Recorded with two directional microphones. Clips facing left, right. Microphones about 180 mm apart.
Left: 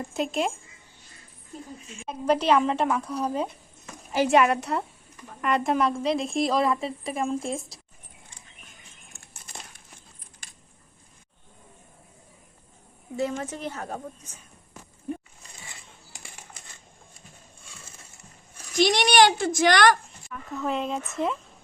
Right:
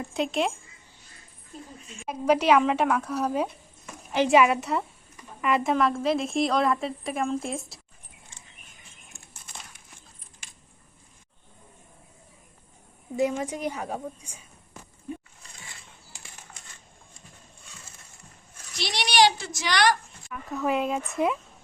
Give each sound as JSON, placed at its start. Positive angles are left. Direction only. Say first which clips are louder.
{"t": 0.0, "sound": "a woman's voice", "louder": "even", "side_deg": 0}
{"t": 2.0, "sound": "a woman's voice", "louder": "right 1 dB", "side_deg": -10}
{"t": 13.1, "sound": "a woman's voice", "louder": "right 3 dB", "side_deg": -15}
{"t": 18.8, "sound": "a child's voice", "louder": "left 4 dB", "side_deg": 50}
{"t": 20.3, "sound": "a woman's voice", "louder": "right 2 dB", "side_deg": -5}